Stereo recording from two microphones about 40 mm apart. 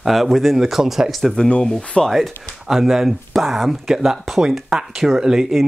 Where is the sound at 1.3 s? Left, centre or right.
Left.